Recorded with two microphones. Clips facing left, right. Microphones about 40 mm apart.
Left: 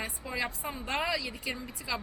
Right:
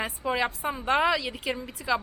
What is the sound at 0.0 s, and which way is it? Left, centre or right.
A woman's voice, right.